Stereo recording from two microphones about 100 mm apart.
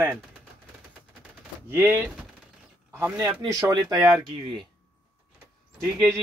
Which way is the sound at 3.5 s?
35° right (ahead or behind).